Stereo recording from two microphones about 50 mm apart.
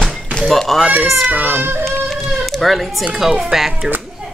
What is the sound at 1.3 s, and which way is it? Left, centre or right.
Speech, right.